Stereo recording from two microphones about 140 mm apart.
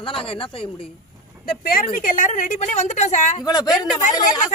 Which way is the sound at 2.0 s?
70° left (ahead or behind).